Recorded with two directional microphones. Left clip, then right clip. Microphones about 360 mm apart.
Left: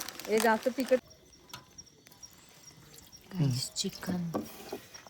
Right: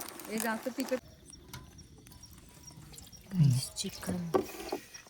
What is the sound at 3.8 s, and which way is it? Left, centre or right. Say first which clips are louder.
Music: left 7 dB; centre.